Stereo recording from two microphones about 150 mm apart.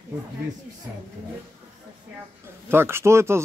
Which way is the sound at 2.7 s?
15° right (ahead or behind).